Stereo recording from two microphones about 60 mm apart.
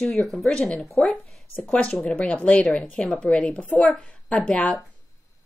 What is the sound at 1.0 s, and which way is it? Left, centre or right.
A woman's voice, left.